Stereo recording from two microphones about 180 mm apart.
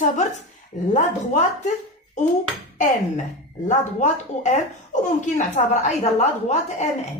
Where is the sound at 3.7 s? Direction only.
40° left (ahead or behind).